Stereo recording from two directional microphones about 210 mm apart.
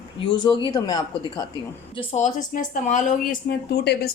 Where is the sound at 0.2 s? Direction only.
25° left (ahead or behind).